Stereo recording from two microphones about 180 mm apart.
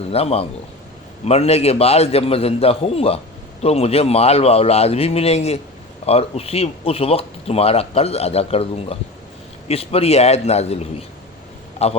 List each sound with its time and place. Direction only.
0.1 s speech: 35° left (ahead or behind)